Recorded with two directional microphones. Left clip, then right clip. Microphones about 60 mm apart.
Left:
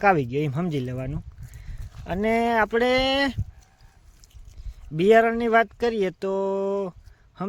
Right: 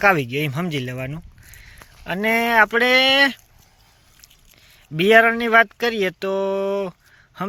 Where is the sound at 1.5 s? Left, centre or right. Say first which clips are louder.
Right 8 dB; left.